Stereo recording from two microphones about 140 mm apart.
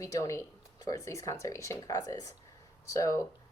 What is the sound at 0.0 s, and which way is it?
A woman's voice, 20° left (ahead or behind).